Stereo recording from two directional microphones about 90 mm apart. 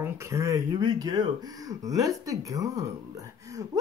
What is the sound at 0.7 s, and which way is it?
Speech, 50° right (ahead or behind).